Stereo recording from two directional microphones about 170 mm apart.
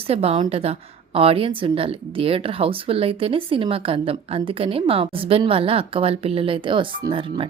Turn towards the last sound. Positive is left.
turn(degrees=-30)  # may be behind; listen again after turning